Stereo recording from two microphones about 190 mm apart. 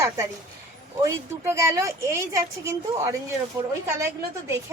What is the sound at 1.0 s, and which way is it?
A woman's voice, 15° right (ahead or behind).